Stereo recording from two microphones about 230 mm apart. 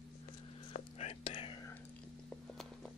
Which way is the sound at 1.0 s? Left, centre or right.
Left.